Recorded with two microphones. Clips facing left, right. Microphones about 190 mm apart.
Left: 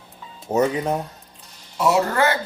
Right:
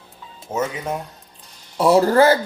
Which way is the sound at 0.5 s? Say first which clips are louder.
Left 4 dB; 35° left (ahead or behind).